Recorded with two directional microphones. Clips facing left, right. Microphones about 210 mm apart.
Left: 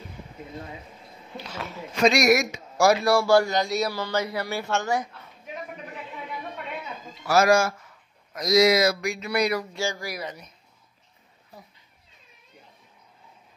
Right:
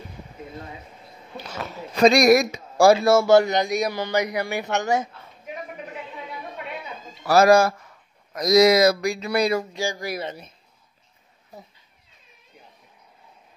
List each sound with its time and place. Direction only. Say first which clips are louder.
1.3 s speech: right 2 dB; 45° right (ahead or behind)
3.0 s speech: right 4 dB; 20° right (ahead or behind)
7.2 s speech: right 4 dB; 35° right (ahead or behind)
9.8 s speech: right 2 dB; 20° right (ahead or behind)